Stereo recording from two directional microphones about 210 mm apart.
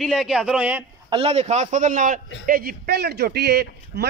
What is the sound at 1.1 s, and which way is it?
A man's voice, 25° right (ahead or behind).